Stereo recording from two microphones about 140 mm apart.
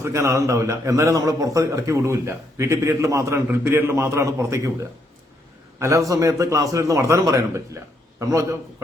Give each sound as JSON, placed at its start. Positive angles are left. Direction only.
{"t": 0.0, "sound": "a man's voice", "side_deg": -20}